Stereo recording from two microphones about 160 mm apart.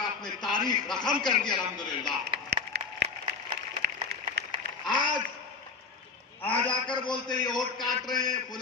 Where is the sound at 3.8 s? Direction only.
90° right.